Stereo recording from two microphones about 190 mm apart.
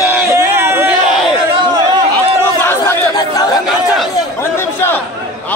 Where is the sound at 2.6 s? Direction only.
15° left (ahead or behind).